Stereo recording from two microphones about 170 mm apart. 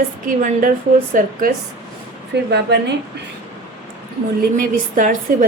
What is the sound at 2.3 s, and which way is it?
Speech, 80° right.